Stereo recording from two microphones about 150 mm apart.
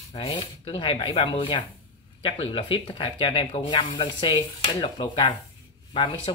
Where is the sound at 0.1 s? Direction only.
35° left (ahead or behind).